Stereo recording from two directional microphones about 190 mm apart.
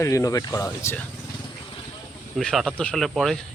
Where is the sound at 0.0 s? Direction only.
15° left (ahead or behind).